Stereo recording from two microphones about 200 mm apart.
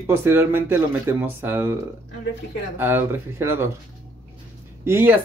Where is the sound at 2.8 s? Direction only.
10° right (ahead or behind).